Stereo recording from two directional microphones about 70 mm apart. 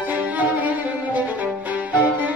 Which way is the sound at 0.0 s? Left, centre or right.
Right.